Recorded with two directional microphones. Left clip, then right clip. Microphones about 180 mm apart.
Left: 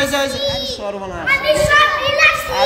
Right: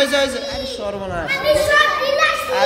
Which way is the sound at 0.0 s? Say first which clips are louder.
Right 1 dB; centre (ahead or behind).